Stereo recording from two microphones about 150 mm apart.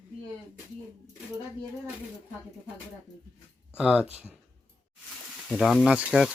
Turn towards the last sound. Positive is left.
turn(degrees=-5)  # may be behind; listen again after turning